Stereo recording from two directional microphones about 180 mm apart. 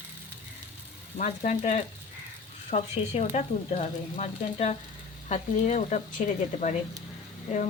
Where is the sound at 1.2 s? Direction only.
45° left (ahead or behind).